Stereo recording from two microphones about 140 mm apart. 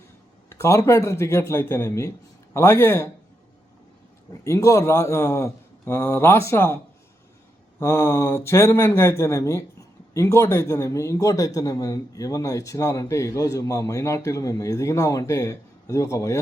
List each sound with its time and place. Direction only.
0.5 s speech: 20° left (ahead or behind)
4.4 s speech: 20° left (ahead or behind)
7.8 s speech: 20° left (ahead or behind)